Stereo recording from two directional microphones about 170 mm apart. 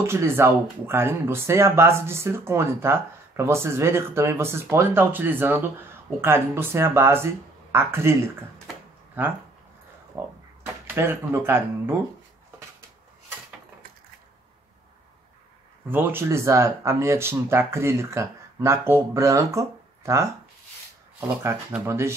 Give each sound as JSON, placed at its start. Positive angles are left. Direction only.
{"t": 0.0, "sound": "speech", "side_deg": -15}
{"t": 15.9, "sound": "speech", "side_deg": -10}
{"t": 21.4, "sound": "speech", "side_deg": -15}